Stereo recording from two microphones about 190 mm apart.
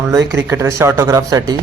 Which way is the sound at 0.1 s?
15° right (ahead or behind).